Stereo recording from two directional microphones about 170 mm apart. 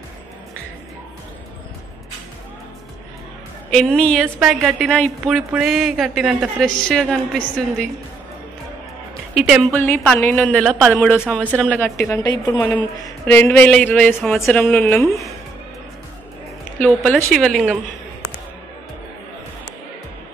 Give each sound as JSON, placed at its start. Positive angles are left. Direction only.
{"t": 3.7, "sound": "speech", "side_deg": 5}
{"t": 9.3, "sound": "a woman's voice", "side_deg": 0}
{"t": 9.8, "sound": "speech", "side_deg": 10}
{"t": 10.6, "sound": "speech", "side_deg": 0}
{"t": 16.8, "sound": "speech", "side_deg": 5}